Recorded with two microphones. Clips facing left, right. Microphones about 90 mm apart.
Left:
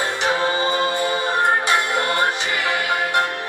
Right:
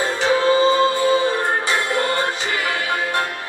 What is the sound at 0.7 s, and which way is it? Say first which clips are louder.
Music: right 5 dB; 20° left (ahead or behind).